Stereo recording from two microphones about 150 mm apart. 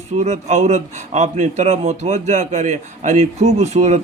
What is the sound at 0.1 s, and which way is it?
A man's voice, 50° right (ahead or behind).